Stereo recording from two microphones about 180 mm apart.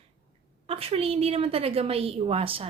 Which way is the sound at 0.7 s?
35° right (ahead or behind).